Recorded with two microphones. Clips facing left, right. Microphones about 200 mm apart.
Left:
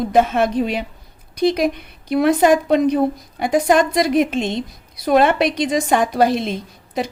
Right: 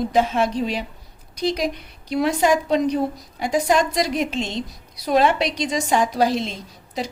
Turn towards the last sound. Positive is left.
turn(degrees=55)  # may be behind; listen again after turning